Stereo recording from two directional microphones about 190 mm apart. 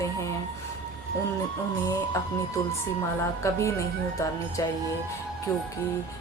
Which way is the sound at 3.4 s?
15° left (ahead or behind).